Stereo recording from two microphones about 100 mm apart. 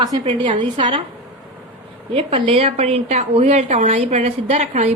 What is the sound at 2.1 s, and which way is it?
A woman's voice, 60° right (ahead or behind).